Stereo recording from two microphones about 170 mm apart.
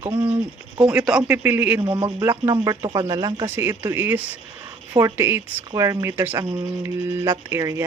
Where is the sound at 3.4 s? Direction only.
15° right (ahead or behind).